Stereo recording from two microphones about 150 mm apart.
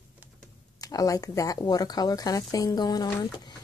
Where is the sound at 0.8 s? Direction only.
25° left (ahead or behind).